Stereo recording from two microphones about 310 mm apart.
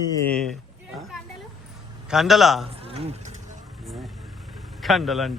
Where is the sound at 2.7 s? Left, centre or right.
Centre.